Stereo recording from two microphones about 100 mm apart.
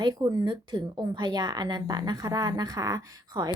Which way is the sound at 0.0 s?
40° right (ahead or behind).